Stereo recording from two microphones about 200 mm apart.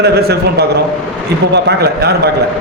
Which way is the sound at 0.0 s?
55° right (ahead or behind).